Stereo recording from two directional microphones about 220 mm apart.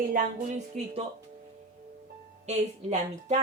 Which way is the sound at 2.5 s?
30° right (ahead or behind).